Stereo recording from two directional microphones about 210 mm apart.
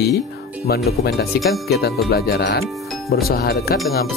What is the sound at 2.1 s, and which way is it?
Speech, 50° left (ahead or behind).